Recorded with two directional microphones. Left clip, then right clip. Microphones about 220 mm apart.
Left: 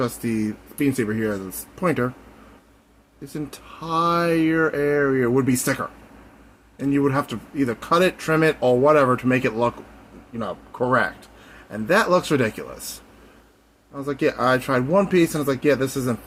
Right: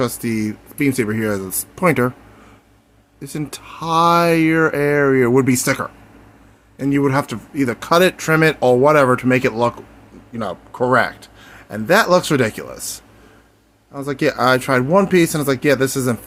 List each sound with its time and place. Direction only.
0.0 s speech: 20° right (ahead or behind)
3.2 s speech: 30° right (ahead or behind)
13.9 s speech: 25° right (ahead or behind)